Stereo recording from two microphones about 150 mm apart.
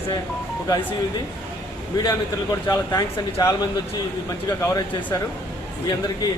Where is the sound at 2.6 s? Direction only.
25° left (ahead or behind).